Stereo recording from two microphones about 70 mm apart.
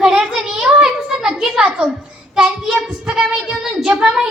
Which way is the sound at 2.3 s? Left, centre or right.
Centre.